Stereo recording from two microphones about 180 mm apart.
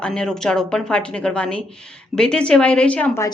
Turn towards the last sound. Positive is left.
turn(degrees=10)  # may be behind; listen again after turning